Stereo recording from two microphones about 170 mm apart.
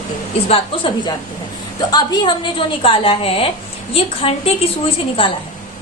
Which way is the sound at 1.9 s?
25° left (ahead or behind).